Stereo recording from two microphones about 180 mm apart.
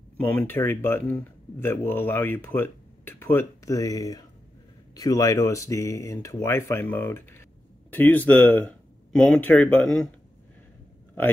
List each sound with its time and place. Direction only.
0.2 s speech: 10° left (ahead or behind)